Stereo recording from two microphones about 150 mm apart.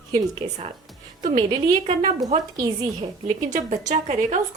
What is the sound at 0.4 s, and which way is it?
Speech, 30° right (ahead or behind).